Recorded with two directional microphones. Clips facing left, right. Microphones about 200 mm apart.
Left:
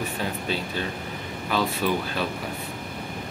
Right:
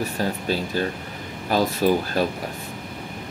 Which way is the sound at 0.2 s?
40° right (ahead or behind).